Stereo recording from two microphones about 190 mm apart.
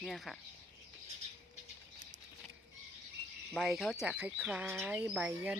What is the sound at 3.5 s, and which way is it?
Speech, centre (ahead or behind).